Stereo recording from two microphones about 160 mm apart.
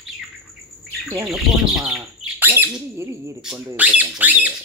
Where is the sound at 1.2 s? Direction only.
Centre (ahead or behind).